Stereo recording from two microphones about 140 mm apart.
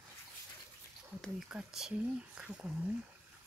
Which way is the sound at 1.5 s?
5° right (ahead or behind).